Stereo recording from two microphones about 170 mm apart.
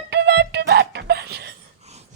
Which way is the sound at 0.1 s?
80° right.